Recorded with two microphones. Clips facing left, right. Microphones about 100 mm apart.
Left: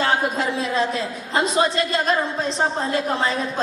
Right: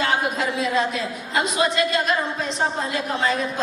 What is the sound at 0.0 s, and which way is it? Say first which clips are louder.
A woman's voice: left 1 dB; 35° left (ahead or behind).